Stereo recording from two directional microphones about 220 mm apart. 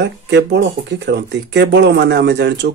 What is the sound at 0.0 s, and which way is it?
Speech, 50° right (ahead or behind).